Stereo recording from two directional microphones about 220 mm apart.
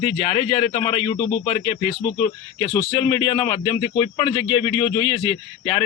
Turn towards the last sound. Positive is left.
turn(degrees=25)  # may be behind; listen again after turning